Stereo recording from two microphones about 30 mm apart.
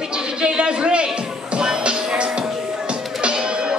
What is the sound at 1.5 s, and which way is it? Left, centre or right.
Music, right.